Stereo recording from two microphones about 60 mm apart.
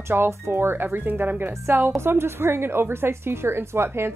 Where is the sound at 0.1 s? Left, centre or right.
Right.